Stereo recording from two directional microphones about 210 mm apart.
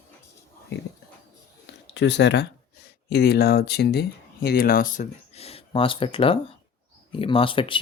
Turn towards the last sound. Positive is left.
turn(degrees=25)  # may be behind; listen again after turning